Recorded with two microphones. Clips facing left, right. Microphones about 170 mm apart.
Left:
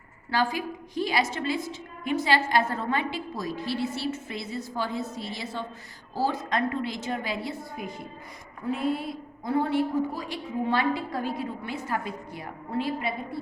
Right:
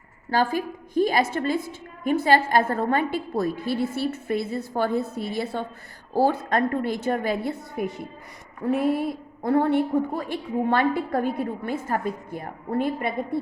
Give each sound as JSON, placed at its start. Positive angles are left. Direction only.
{"t": 0.3, "sound": "a woman's voice", "side_deg": -50}